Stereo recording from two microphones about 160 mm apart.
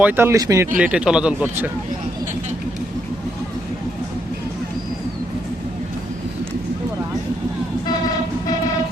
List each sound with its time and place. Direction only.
0.0 s speech: 15° right (ahead or behind)
0.8 s speech: 5° right (ahead or behind)